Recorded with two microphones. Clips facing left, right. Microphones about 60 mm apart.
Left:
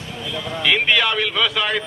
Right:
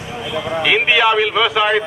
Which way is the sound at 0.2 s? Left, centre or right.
Centre.